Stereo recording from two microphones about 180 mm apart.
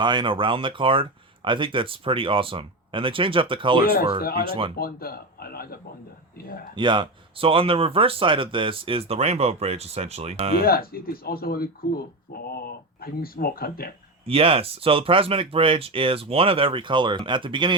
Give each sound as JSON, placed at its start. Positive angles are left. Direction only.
{"t": 0.0, "sound": "speech", "side_deg": -25}
{"t": 4.2, "sound": "speech", "side_deg": 55}
{"t": 4.4, "sound": "speech", "side_deg": -30}
{"t": 4.8, "sound": "speech", "side_deg": 55}
{"t": 6.7, "sound": "speech", "side_deg": -25}
{"t": 10.6, "sound": "speech", "side_deg": 55}
{"t": 14.3, "sound": "speech", "side_deg": -30}